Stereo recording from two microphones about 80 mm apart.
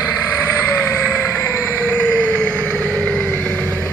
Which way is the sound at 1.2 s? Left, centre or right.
Left.